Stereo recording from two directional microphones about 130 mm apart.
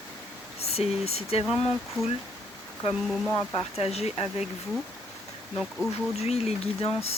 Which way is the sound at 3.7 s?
55° left (ahead or behind).